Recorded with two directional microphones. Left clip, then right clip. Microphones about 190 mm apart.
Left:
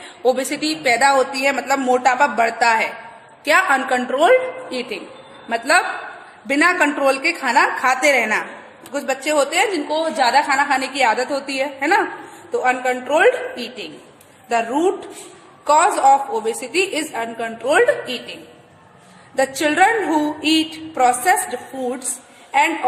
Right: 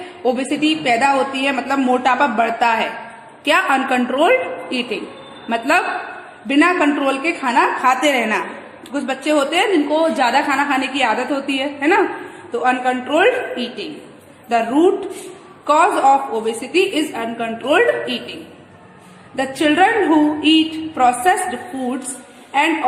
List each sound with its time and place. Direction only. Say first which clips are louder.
0.3 s a woman's voice: right 1 dB; 30° left (ahead or behind)
19.4 s a woman's voice: right 1 dB; 35° left (ahead or behind)
22.5 s a woman's voice: even; 35° left (ahead or behind)